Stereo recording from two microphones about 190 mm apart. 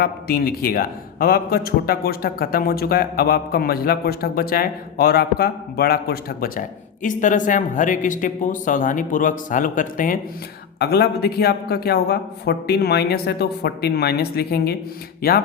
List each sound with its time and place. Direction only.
0.0 s a man's voice: 50° left (ahead or behind)
10.8 s a man's voice: 55° left (ahead or behind)